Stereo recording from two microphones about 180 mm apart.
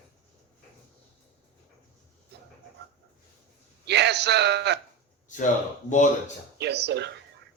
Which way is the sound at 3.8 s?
70° right (ahead or behind).